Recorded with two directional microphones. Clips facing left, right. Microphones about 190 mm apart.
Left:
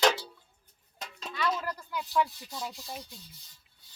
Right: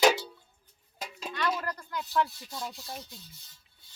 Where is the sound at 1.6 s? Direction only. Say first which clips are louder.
Even; 5° left (ahead or behind).